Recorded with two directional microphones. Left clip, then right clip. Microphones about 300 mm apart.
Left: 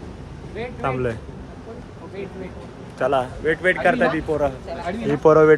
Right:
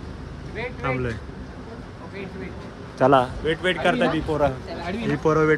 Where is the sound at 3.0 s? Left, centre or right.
Right.